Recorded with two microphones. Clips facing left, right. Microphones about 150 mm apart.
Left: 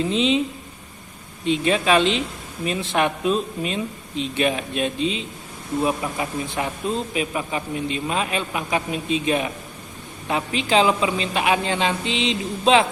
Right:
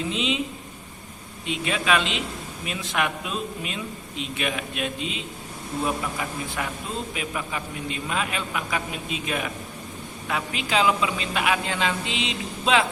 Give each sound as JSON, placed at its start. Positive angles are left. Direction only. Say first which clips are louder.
{"t": 0.1, "sound": "speech", "louder": "left 7 dB", "side_deg": 30}
{"t": 1.5, "sound": "a man's voice", "louder": "left 6 dB", "side_deg": 35}